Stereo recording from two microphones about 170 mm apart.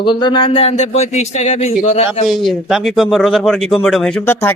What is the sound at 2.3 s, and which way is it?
A man's voice, centre (ahead or behind).